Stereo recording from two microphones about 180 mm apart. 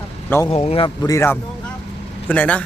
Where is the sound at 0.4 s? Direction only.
35° left (ahead or behind).